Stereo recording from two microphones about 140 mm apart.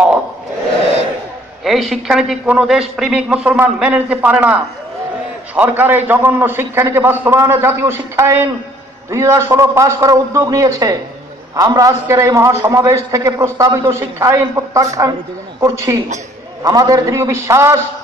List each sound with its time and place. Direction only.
1.6 s a man's voice: centre (ahead or behind); by 17.7 s 20° right (ahead or behind)